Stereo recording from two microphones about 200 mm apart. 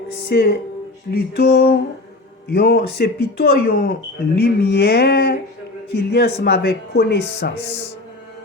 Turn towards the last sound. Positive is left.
turn(degrees=55)  # may be behind; listen again after turning